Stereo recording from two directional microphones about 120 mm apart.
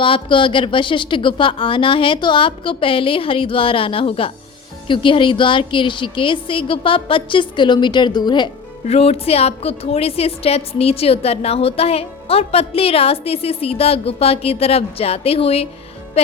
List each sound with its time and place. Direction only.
0.0 s a woman's voice: 45° left (ahead or behind)
8.9 s a woman's voice: 55° left (ahead or behind)